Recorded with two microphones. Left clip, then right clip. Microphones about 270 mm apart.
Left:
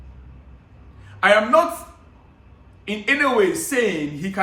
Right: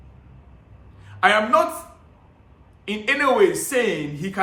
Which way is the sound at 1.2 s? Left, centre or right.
Centre.